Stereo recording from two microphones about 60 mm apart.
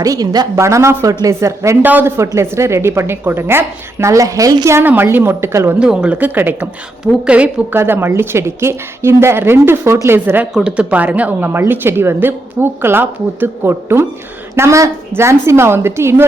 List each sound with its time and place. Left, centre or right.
0.0 s a woman's voice: right
0.5 s speech: right
1.8 s speech: right
2.1 s speech: right
4.0 s a woman's voice: right
5.0 s speech: right
5.8 s a woman's voice: centre
6.1 s speech: right
7.3 s speech: centre
7.7 s speech: right
10.6 s a woman's voice: centre; by 16.2 s right